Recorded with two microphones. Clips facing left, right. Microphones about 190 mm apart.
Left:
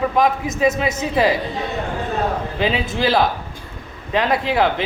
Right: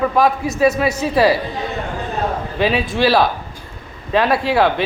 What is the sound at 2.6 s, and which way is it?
A woman's voice, 20° left (ahead or behind).